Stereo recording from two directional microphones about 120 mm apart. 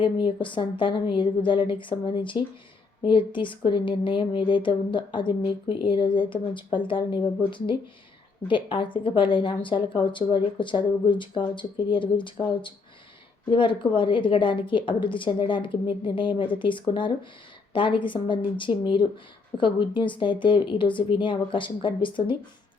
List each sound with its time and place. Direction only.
0.0 s speech: 40° left (ahead or behind)
13.5 s speech: 45° left (ahead or behind)